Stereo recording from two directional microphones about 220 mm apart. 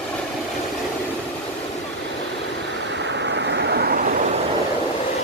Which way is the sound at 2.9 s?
55° right (ahead or behind).